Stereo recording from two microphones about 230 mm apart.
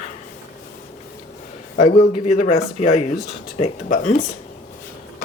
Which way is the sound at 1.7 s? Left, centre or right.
Left.